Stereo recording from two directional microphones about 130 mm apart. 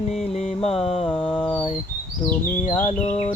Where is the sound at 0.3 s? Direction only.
55° left (ahead or behind).